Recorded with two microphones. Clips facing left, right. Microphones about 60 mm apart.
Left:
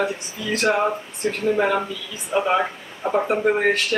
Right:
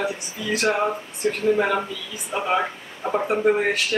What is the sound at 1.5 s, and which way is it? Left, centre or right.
Speech, centre.